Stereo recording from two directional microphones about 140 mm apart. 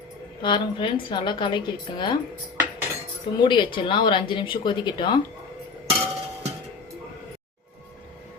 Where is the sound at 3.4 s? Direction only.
35° left (ahead or behind).